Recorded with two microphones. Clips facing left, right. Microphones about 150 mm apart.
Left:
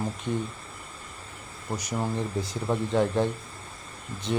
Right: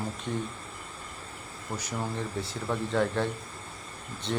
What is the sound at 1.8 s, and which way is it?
Speech, 15° left (ahead or behind).